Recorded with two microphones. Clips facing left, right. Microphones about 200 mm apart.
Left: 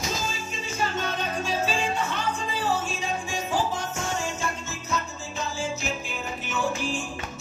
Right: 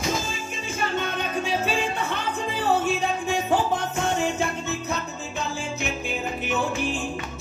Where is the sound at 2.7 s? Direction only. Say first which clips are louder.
Right 9 dB; 60° right (ahead or behind).